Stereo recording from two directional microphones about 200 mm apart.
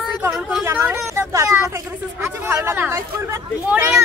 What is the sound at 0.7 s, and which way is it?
Speech, 15° right (ahead or behind).